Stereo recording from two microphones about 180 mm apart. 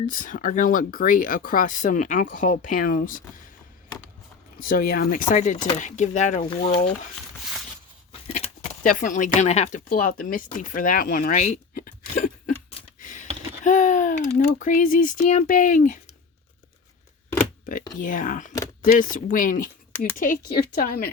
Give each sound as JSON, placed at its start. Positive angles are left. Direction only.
{"t": 0.1, "sound": "speech", "side_deg": 45}
{"t": 4.6, "sound": "speech", "side_deg": 55}
{"t": 5.3, "sound": "speech", "side_deg": 45}
{"t": 8.3, "sound": "speech", "side_deg": 45}
{"t": 9.9, "sound": "speech", "side_deg": 50}
{"t": 13.0, "sound": "a sound", "side_deg": 45}
{"t": 13.7, "sound": "speech", "side_deg": 45}
{"t": 18.0, "sound": "speech", "side_deg": 50}